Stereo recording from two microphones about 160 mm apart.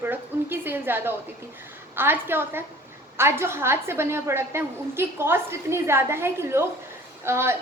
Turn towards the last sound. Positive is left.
turn(degrees=-15)  # may be behind; listen again after turning